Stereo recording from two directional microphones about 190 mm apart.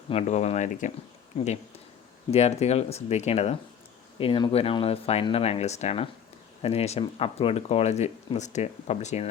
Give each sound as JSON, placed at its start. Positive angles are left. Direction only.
{"t": 0.1, "sound": "speech", "side_deg": 35}
{"t": 2.3, "sound": "speech", "side_deg": 35}